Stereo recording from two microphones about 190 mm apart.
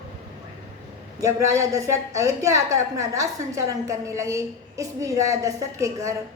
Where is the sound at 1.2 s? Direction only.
15° right (ahead or behind).